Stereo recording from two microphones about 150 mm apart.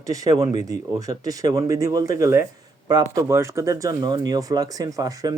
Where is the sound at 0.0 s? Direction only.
25° right (ahead or behind).